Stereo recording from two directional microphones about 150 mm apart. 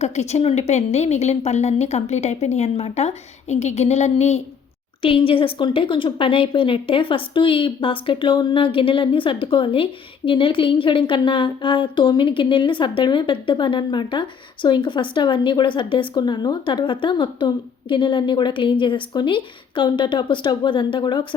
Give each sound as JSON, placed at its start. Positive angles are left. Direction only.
{"t": 0.0, "sound": "a woman's voice", "side_deg": 45}